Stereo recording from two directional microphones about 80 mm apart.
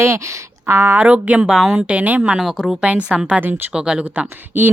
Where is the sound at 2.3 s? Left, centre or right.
Centre; by 4.7 s right.